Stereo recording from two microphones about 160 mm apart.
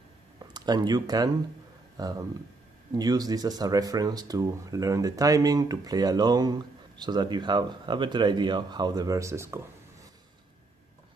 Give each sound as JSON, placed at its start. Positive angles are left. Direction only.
{"t": 0.4, "sound": "speech", "side_deg": -25}